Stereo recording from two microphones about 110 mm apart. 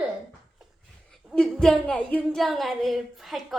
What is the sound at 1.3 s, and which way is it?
A child's voice, 5° left (ahead or behind).